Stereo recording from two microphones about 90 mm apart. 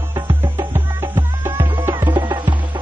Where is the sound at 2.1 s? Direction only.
55° right (ahead or behind).